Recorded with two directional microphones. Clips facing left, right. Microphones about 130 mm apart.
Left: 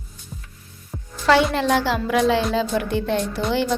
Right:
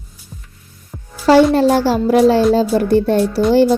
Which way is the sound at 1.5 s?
40° right (ahead or behind).